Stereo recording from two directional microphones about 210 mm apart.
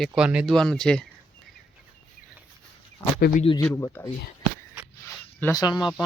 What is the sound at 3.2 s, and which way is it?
Speech, 45° left (ahead or behind).